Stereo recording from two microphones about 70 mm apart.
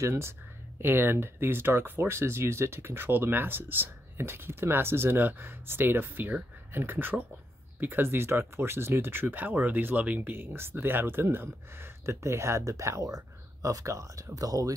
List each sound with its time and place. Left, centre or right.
0.0 s speech: right